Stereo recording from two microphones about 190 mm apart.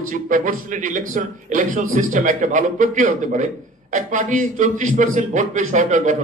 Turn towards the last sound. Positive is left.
turn(degrees=-45)  # may be behind; listen again after turning